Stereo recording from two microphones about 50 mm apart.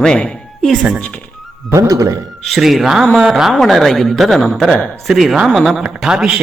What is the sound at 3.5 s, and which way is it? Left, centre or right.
A woman's voice, centre.